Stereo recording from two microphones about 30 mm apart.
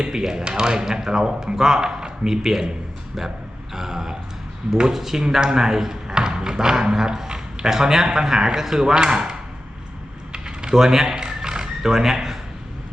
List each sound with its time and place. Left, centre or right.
0.0 s speech: right
3.8 s a man's voice: centre
5.4 s speech: right
10.3 s typing: right
10.8 s a man's voice: centre
11.2 s a sound: right